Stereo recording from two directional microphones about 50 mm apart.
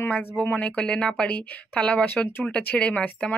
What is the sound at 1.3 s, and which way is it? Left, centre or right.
Speech, left.